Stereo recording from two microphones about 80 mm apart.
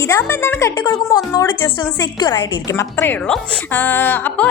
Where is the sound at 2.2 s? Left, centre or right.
Left.